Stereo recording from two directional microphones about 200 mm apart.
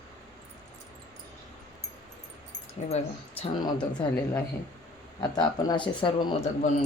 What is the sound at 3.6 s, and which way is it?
Speech, 20° left (ahead or behind).